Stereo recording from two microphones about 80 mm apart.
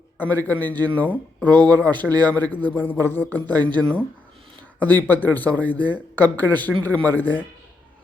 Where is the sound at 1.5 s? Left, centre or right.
Right.